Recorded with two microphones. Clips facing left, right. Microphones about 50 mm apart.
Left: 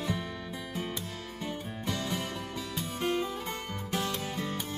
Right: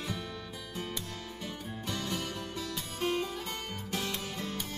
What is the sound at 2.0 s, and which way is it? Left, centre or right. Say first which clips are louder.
Music: left 2 dB; left.